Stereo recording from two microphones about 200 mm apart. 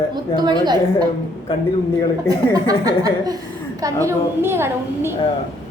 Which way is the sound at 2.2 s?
20° right (ahead or behind).